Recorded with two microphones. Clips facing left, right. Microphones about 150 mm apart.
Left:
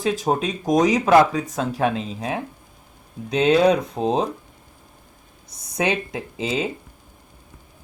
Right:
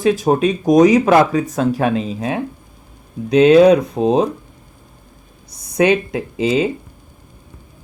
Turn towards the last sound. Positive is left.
turn(degrees=-70)  # may be behind; listen again after turning